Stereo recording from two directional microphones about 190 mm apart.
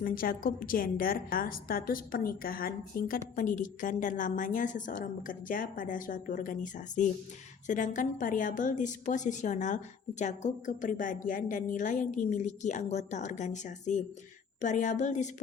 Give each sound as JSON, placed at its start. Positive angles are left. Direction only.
{"t": 0.0, "sound": "a woman's voice", "side_deg": 50}